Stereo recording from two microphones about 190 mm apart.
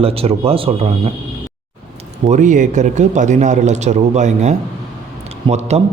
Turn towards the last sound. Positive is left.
turn(degrees=-35)  # may be behind; listen again after turning